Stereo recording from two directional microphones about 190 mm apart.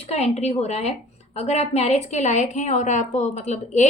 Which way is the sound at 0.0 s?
35° left (ahead or behind).